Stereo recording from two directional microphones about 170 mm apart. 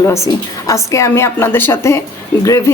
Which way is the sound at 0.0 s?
15° left (ahead or behind).